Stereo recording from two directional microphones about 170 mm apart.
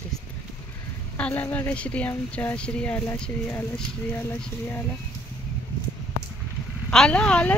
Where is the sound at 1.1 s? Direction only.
10° left (ahead or behind).